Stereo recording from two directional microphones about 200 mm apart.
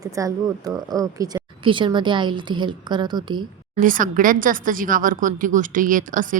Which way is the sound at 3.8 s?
40° right (ahead or behind).